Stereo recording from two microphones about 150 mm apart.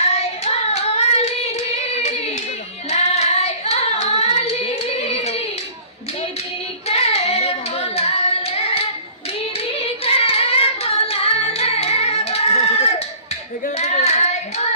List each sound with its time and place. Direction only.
0.1 s hands: 45° left (ahead or behind)
6.8 s hands: 45° left (ahead or behind)
9.7 s singing: 40° left (ahead or behind)
13.7 s child singing: 45° left (ahead or behind)